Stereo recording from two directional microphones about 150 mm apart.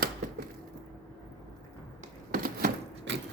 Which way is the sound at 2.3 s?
70° right (ahead or behind).